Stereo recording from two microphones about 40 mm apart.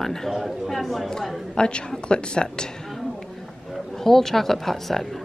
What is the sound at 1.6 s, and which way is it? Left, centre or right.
Speech, left.